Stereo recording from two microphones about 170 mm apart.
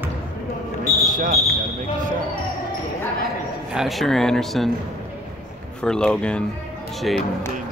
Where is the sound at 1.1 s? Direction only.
55° right (ahead or behind).